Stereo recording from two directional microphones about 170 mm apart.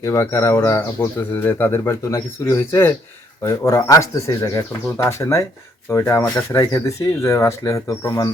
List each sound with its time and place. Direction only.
0.0 s speech: 15° left (ahead or behind)